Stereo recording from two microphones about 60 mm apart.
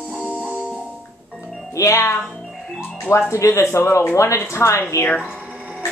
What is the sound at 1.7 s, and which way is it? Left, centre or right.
Speech, left.